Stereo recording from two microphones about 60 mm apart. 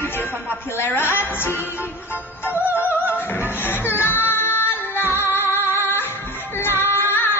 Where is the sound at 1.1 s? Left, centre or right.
Left.